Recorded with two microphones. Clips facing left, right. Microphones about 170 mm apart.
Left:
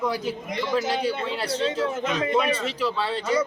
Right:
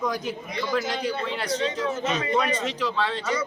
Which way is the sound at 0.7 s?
30° left (ahead or behind).